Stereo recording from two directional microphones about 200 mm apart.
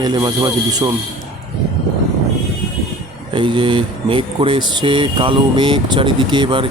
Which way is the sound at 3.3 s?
25° right (ahead or behind).